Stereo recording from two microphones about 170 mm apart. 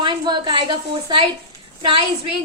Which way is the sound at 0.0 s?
25° right (ahead or behind).